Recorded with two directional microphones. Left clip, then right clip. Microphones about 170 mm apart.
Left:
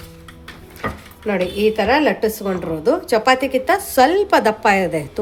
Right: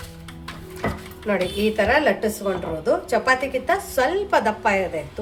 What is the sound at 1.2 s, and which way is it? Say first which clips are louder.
A woman's voice: left 4 dB; 45° left (ahead or behind).